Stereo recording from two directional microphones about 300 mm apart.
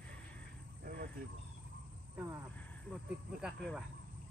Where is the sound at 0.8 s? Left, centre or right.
Right.